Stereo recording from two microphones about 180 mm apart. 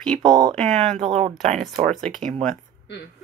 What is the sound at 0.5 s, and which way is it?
Speech, 5° left (ahead or behind).